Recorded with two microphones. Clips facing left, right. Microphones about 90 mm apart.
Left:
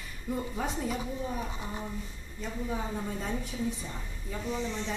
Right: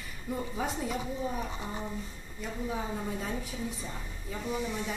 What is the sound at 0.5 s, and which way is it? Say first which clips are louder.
Speech: even; centre (ahead or behind).